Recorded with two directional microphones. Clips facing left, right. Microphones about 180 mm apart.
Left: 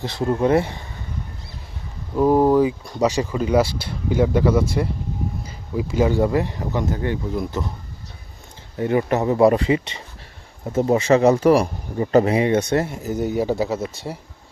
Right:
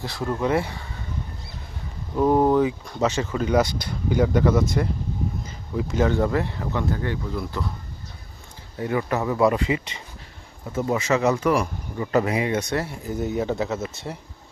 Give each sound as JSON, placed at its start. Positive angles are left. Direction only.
{"t": 0.0, "sound": "speech", "side_deg": 25}
{"t": 2.1, "sound": "speech", "side_deg": 5}
{"t": 8.8, "sound": "speech", "side_deg": 25}
{"t": 13.1, "sound": "a man's voice", "side_deg": 0}
{"t": 13.7, "sound": "speech", "side_deg": 30}